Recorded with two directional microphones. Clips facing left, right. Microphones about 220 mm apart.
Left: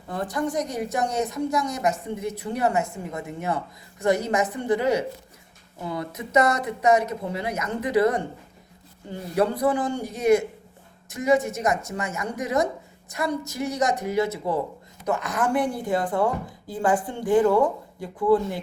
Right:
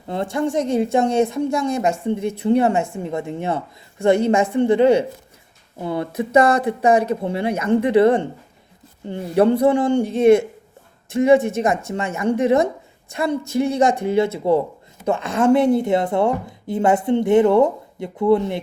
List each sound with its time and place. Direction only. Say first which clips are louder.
0.1 s a woman's voice: right 5 dB; 25° right (ahead or behind)